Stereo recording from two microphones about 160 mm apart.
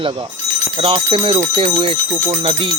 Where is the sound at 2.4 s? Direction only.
35° right (ahead or behind).